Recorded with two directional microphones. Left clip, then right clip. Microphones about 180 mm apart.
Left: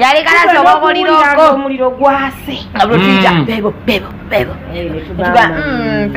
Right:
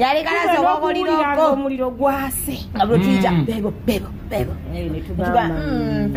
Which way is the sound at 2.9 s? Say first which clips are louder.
Left 9 dB; 10° left (ahead or behind).